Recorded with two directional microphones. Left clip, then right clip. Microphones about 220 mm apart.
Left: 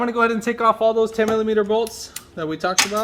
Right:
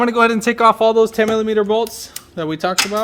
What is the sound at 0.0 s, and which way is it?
Speech, 40° right (ahead or behind).